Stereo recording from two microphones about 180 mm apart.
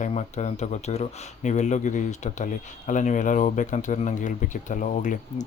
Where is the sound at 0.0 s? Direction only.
40° left (ahead or behind).